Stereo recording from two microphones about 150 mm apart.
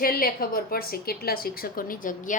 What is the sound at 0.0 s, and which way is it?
A woman's voice, 80° left.